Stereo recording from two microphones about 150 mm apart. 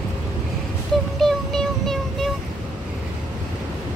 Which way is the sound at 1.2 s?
Centre (ahead or behind).